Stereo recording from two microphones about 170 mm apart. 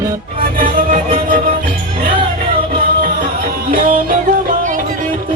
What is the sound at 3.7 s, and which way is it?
Music, 55° right (ahead or behind).